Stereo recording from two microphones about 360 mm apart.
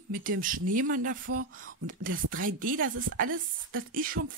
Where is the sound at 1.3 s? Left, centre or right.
Right.